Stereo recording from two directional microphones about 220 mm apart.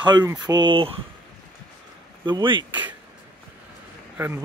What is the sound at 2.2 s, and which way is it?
Speech, 20° right (ahead or behind).